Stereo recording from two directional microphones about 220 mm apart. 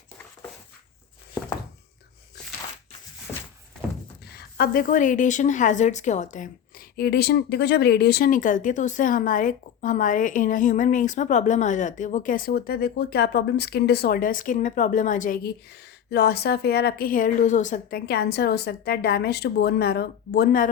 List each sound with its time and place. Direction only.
4.4 s a woman's voice: 45° left (ahead or behind)
16.0 s a woman's voice: 50° left (ahead or behind)